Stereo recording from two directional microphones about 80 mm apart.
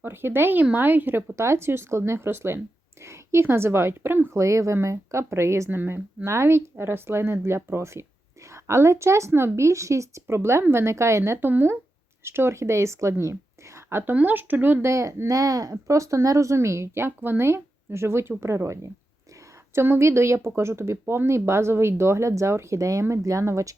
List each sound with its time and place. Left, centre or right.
0.0 s speech: right
1.4 s a woman's voice: right
4.4 s speech: right
11.2 s speech: right
13.7 s speech: right